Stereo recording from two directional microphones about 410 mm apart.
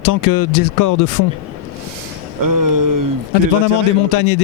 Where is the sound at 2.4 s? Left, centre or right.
Right.